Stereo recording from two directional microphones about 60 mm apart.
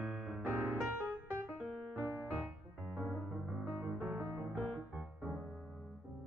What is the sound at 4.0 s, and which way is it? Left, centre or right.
Music, right.